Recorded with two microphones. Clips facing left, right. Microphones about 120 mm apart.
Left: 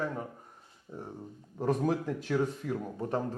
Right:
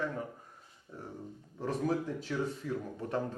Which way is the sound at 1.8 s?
60° left (ahead or behind).